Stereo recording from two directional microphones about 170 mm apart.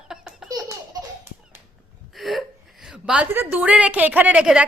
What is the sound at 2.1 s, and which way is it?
A woman's voice, centre (ahead or behind).